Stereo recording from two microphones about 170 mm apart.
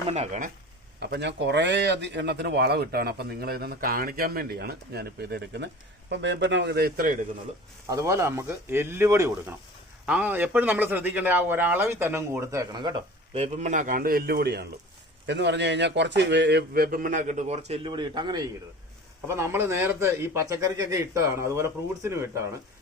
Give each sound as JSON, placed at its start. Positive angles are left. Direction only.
{"t": 0.1, "sound": "speech", "side_deg": -40}
{"t": 0.9, "sound": "a man's voice", "side_deg": -85}
{"t": 6.1, "sound": "speech", "side_deg": -90}
{"t": 7.9, "sound": "a man's voice", "side_deg": -20}
{"t": 13.3, "sound": "speech", "side_deg": -40}
{"t": 15.3, "sound": "a man's voice", "side_deg": -90}